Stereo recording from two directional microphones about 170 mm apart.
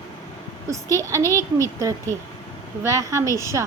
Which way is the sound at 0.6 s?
20° right (ahead or behind).